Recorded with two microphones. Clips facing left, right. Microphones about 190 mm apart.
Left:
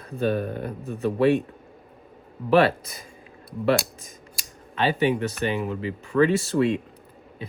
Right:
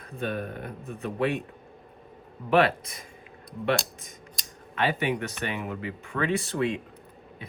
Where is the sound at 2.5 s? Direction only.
35° left (ahead or behind).